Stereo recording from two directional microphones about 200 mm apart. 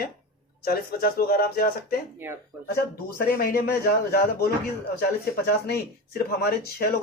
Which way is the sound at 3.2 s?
50° left (ahead or behind).